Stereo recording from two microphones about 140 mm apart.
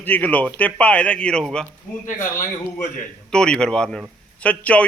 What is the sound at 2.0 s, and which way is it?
Speech, 65° left (ahead or behind).